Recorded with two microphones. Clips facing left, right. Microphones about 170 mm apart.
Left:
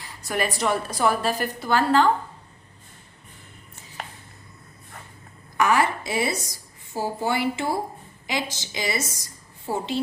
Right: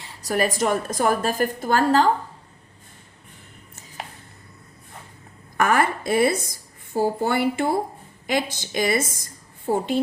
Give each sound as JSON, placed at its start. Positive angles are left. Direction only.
{"t": 0.0, "sound": "a woman's voice", "side_deg": -30}
{"t": 5.5, "sound": "a woman's voice", "side_deg": -50}